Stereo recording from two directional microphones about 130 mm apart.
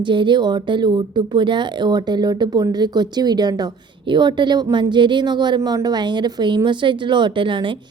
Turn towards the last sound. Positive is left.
turn(degrees=-40)  # may be behind; listen again after turning